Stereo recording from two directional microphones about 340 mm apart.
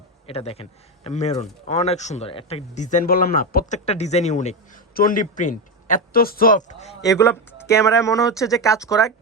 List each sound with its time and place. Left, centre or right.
0.3 s speech: centre